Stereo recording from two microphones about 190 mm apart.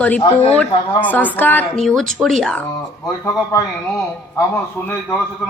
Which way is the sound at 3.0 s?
20° left (ahead or behind).